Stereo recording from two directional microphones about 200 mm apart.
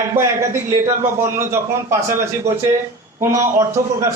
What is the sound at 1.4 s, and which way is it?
Speech, 15° right (ahead or behind).